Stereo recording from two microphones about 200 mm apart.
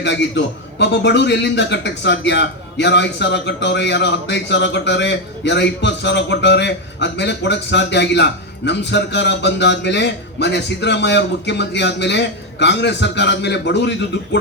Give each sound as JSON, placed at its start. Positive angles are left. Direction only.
{"t": 0.0, "sound": "a man's voice", "side_deg": 60}